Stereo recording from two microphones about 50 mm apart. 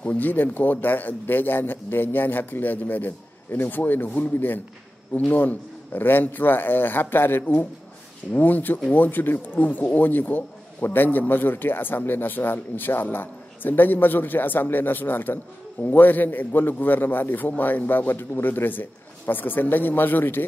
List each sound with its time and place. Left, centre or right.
0.0 s a man's voice: left